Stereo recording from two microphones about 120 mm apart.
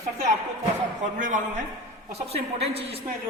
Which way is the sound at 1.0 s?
90° right.